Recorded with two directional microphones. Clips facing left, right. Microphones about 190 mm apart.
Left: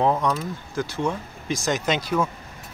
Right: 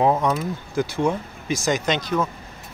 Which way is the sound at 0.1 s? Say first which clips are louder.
Right 2 dB; 25° right (ahead or behind).